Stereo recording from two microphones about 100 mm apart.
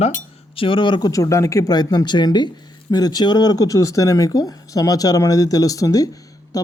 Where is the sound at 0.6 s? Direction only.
55° left (ahead or behind).